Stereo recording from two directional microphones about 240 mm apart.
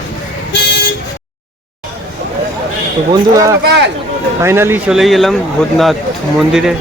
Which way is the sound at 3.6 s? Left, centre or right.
Right.